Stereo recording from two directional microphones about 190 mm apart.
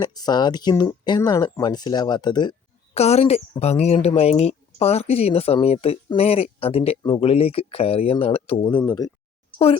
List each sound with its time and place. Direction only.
0.0 s speech: 20° left (ahead or behind)
3.0 s speech: 35° left (ahead or behind)
8.6 s speech: 20° left (ahead or behind)